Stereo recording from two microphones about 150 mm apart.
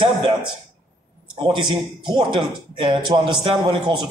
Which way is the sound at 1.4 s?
30° right (ahead or behind).